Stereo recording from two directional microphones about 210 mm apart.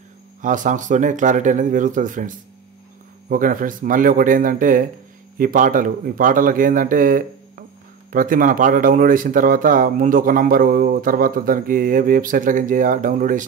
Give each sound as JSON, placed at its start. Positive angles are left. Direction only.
{"t": 0.4, "sound": "speech", "side_deg": -40}